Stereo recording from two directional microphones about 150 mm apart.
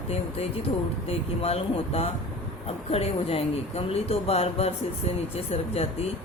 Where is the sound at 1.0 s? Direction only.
40° left (ahead or behind).